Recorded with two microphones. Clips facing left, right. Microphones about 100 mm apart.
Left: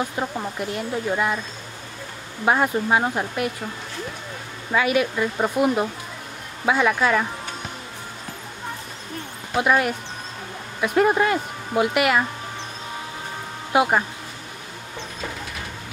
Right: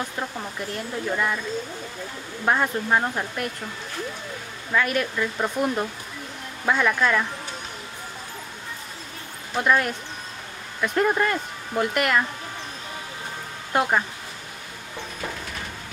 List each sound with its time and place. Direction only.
0.0 s speech: 15° left (ahead or behind)
2.4 s speech: 10° left (ahead or behind)
4.7 s speech: 5° left (ahead or behind)
9.6 s speech: 5° left (ahead or behind)
13.7 s speech: 15° left (ahead or behind)